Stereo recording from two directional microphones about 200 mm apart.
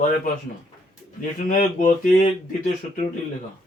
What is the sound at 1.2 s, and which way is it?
Speech, 40° left (ahead or behind).